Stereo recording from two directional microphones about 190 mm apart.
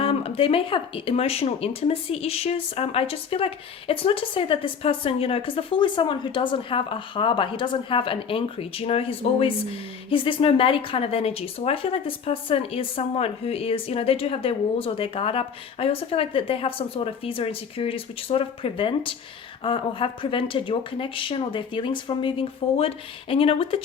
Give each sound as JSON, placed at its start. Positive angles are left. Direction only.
{"t": 0.0, "sound": "speech", "side_deg": 30}